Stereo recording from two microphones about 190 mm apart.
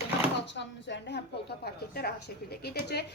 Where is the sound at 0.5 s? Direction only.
65° left (ahead or behind).